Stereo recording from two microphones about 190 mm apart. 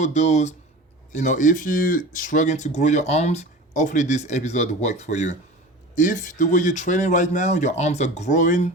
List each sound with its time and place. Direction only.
0.0 s speech: 35° left (ahead or behind)